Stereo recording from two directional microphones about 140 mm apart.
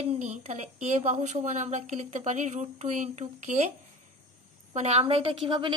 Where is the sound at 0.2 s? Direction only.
55° right (ahead or behind).